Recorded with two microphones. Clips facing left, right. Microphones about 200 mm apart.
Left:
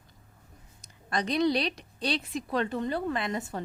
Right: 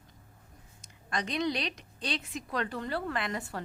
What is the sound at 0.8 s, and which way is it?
A woman's voice, 35° left (ahead or behind).